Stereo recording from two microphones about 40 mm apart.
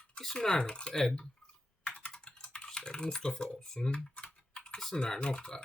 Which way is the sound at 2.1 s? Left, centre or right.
Left.